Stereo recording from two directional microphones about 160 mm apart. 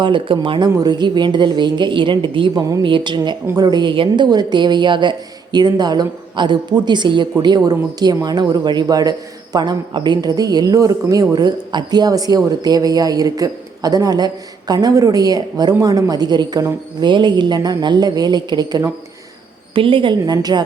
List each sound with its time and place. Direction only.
0.0 s a woman's voice: 30° right (ahead or behind)